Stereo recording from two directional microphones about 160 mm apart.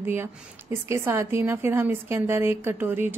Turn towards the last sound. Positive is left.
turn(degrees=-10)  # may be behind; listen again after turning